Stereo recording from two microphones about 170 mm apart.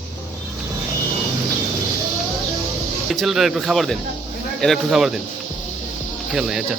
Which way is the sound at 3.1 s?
Centre (ahead or behind).